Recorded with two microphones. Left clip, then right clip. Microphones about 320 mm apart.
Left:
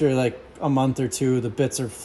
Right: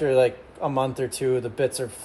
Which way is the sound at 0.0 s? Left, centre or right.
Left.